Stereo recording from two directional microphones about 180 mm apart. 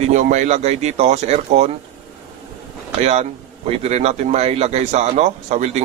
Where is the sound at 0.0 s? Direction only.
40° right (ahead or behind).